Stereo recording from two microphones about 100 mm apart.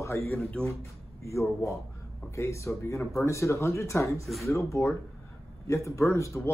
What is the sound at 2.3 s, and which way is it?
A man's voice, 30° left (ahead or behind).